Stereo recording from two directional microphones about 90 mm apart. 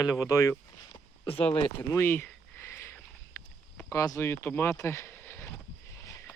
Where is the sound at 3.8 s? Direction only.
40° left (ahead or behind).